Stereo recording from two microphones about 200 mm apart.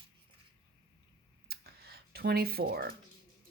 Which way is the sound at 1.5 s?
50° right (ahead or behind).